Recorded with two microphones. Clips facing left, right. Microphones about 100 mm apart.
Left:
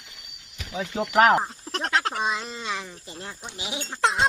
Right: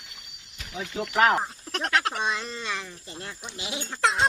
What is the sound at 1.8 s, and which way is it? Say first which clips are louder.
Speech: even; 25° left (ahead or behind).